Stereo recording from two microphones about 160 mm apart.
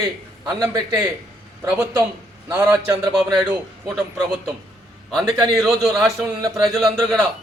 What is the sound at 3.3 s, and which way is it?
Speech, 5° right (ahead or behind).